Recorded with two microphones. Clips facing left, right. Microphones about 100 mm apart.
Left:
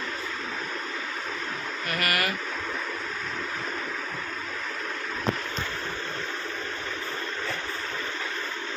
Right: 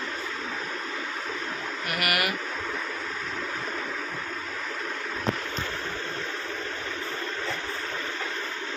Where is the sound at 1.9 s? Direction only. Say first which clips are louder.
Even; 15° right (ahead or behind).